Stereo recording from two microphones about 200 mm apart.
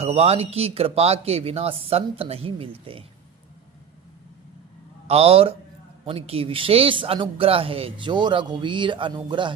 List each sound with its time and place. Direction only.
0.0 s speech: 30° right (ahead or behind)
5.0 s a man's voice: 30° right (ahead or behind)